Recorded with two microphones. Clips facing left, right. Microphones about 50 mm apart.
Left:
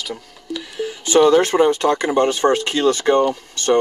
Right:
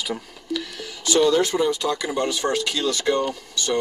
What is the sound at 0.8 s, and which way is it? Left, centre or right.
Speech, left.